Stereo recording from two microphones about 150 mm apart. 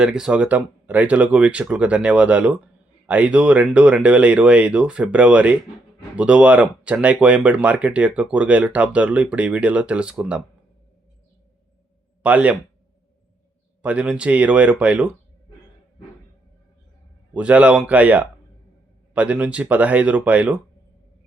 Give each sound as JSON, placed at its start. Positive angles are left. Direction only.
{"t": 0.0, "sound": "speech", "side_deg": -5}
{"t": 12.2, "sound": "speech", "side_deg": -10}
{"t": 13.8, "sound": "speech", "side_deg": -10}
{"t": 17.3, "sound": "speech", "side_deg": -10}